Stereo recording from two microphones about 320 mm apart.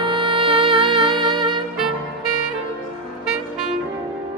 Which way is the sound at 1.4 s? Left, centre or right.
Centre.